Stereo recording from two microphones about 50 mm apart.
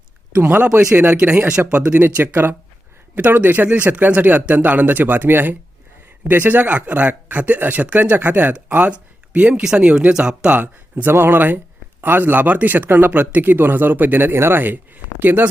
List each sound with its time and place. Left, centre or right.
0.9 s speech: right
2.0 s speech: right; by 10.5 s centre
10.5 s speech: right
11.1 s speech: right
14.6 s speech: right